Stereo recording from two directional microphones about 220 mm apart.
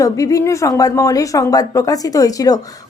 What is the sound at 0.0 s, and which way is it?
Speech, 15° left (ahead or behind).